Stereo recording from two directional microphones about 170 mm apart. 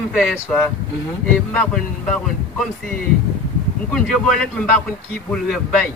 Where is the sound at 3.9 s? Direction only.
5° left (ahead or behind).